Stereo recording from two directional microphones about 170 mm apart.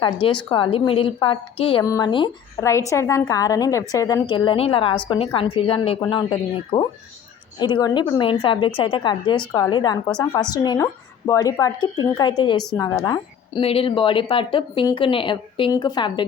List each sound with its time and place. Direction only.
0.0 s a woman's voice: 30° left (ahead or behind)
1.8 s a woman's voice: 20° left (ahead or behind)
2.9 s a woman's voice: 15° left (ahead or behind)